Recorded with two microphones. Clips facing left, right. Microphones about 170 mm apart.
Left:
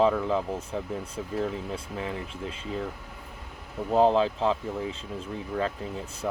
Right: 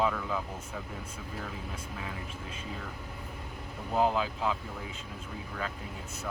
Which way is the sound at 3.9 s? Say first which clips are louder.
Left 7 dB; 30° left (ahead or behind).